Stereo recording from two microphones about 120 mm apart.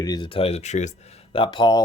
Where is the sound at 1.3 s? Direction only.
45° left (ahead or behind).